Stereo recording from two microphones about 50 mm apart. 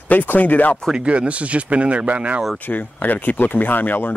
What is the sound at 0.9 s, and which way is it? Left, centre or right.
Speech, right.